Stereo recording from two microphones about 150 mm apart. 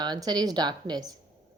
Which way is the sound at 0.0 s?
25° right (ahead or behind).